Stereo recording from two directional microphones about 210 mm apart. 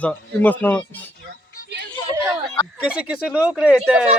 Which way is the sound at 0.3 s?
10° left (ahead or behind).